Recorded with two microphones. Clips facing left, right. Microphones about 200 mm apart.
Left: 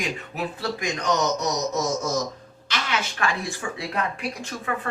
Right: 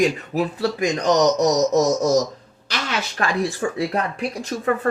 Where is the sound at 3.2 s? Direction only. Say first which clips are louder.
Right 6 dB; 35° right (ahead or behind).